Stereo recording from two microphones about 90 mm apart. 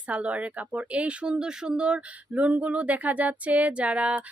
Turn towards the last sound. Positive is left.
turn(degrees=-15)  # may be behind; listen again after turning